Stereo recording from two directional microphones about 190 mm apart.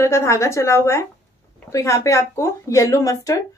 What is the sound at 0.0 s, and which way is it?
Speech, 15° left (ahead or behind).